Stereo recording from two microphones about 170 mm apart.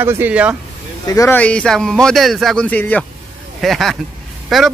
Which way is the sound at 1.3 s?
5° left (ahead or behind).